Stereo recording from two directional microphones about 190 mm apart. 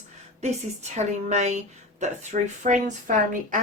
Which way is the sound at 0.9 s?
35° right (ahead or behind).